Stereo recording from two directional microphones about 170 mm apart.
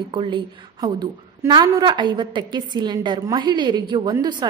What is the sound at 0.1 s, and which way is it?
A woman's voice, 30° right (ahead or behind).